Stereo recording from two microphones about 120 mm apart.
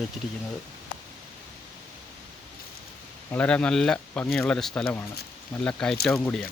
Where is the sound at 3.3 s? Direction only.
10° left (ahead or behind).